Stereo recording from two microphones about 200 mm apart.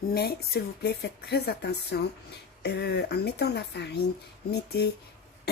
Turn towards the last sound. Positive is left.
turn(degrees=55)  # may be behind; listen again after turning